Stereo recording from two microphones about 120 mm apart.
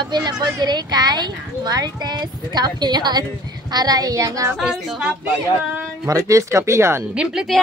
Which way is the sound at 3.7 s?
35° right (ahead or behind).